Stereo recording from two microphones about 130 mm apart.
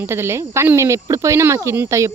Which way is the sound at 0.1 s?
20° right (ahead or behind).